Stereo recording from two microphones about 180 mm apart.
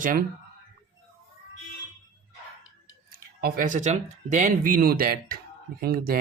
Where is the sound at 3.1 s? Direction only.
50° right (ahead or behind).